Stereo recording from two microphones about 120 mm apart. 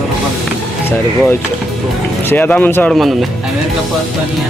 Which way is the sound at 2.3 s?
15° left (ahead or behind).